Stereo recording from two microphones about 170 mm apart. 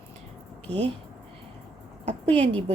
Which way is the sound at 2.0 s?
40° right (ahead or behind).